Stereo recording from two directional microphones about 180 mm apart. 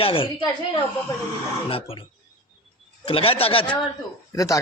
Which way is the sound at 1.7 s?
30° left (ahead or behind).